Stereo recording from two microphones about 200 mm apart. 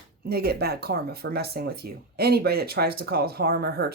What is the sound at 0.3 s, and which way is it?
Speech, 50° right (ahead or behind).